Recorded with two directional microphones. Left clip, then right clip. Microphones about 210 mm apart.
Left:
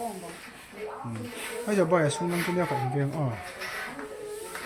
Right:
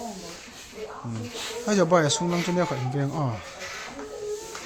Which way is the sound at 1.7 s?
20° right (ahead or behind).